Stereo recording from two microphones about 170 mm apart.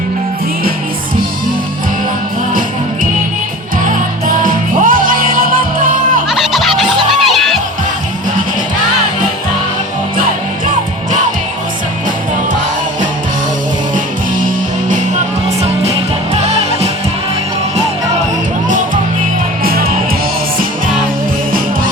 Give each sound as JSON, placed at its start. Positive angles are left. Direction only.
{"t": 2.5, "sound": "music", "side_deg": -55}
{"t": 6.2, "sound": "music", "side_deg": 0}
{"t": 7.2, "sound": "crowd", "side_deg": 0}
{"t": 19.6, "sound": "music", "side_deg": -60}